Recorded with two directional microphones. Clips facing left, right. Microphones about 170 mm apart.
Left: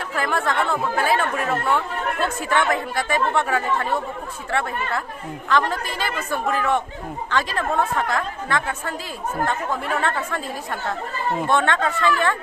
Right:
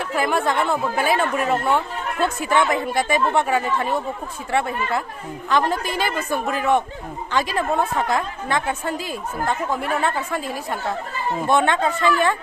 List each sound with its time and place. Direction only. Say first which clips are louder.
0.1 s speech: right 2 dB; 15° right (ahead or behind)
10.0 s speech: right 1 dB; 10° right (ahead or behind)